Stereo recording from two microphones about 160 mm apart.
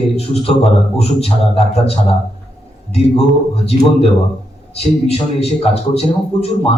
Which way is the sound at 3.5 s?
40° left (ahead or behind).